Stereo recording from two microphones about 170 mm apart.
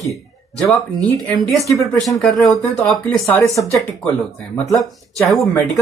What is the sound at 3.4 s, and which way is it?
Speech, 20° left (ahead or behind).